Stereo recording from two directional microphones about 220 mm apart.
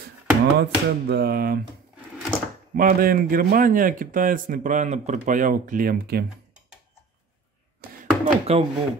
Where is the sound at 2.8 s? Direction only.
40° right (ahead or behind).